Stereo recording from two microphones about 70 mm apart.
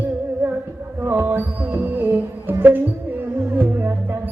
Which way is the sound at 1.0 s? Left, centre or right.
Right.